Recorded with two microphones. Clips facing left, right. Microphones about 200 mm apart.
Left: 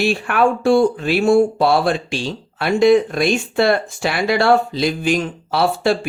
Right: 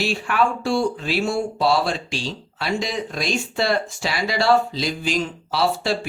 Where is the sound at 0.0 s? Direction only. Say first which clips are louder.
Left 5 dB; 55° left (ahead or behind).